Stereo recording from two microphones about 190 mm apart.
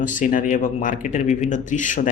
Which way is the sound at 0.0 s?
45° left (ahead or behind).